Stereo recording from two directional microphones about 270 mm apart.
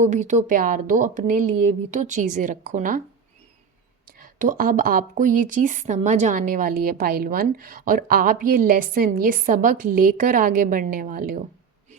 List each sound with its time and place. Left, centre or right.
0.0 s speech: right
4.2 s a woman's voice: right